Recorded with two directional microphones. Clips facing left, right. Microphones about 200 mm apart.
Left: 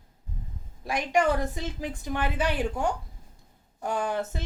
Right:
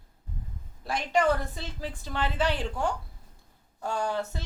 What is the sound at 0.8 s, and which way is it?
A woman's voice, 15° left (ahead or behind).